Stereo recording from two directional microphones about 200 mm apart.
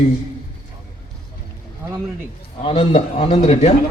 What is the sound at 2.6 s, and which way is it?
A man's voice, 25° left (ahead or behind).